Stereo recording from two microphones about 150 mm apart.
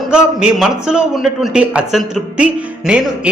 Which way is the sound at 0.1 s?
5° right (ahead or behind).